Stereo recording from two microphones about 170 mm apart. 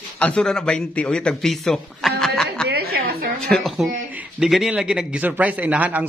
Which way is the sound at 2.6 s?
70° right (ahead or behind).